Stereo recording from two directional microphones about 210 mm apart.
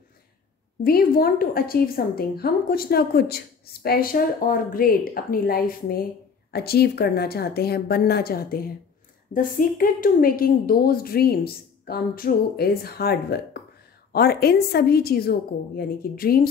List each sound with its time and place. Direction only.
0.8 s a woman's voice: 45° left (ahead or behind)